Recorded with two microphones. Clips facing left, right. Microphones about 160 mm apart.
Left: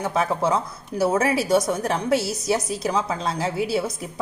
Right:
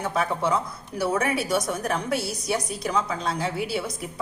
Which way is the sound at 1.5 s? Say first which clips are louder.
Left 5 dB; 25° left (ahead or behind).